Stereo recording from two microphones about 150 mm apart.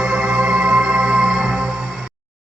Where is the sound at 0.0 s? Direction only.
5° right (ahead or behind).